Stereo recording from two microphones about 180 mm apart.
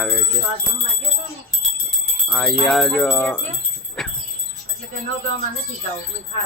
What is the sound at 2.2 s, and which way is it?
Speech, 5° left (ahead or behind).